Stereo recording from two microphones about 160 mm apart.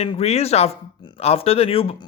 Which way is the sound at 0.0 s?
40° left (ahead or behind).